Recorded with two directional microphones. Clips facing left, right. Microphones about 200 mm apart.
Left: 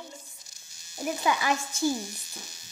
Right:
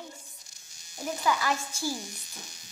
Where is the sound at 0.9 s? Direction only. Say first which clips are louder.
Left 1 dB; 20° left (ahead or behind).